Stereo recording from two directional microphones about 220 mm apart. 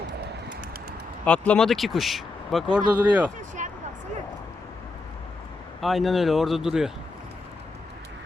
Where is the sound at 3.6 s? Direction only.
35° right (ahead or behind).